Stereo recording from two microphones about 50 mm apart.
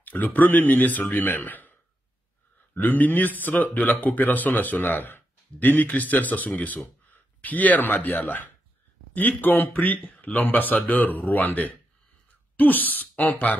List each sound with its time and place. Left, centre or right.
0.0 s speech: left